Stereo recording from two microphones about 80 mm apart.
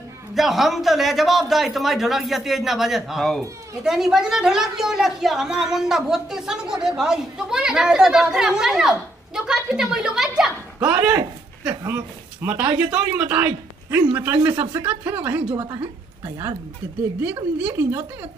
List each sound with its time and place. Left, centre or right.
0.3 s a man's voice: centre
10.9 s a woman's voice: centre
17.3 s a man's voice: centre